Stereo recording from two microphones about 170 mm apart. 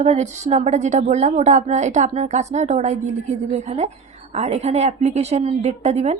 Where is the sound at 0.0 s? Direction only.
40° right (ahead or behind).